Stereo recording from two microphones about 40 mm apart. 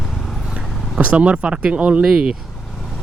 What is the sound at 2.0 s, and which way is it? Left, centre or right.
Speech, centre.